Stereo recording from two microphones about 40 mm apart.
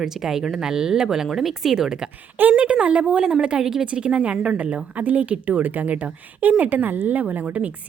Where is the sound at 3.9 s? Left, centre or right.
Right.